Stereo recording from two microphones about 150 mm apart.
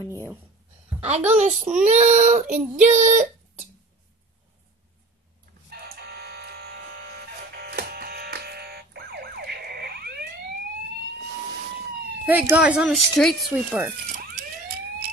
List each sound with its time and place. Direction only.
0.0 s a sound: 20° left (ahead or behind)
1.3 s a child's voice: 50° right (ahead or behind)
5.7 s a sound: 90° right
12.3 s speech: 10° right (ahead or behind)
12.9 s a woman's voice: centre (ahead or behind)
13.5 s speech: 10° right (ahead or behind)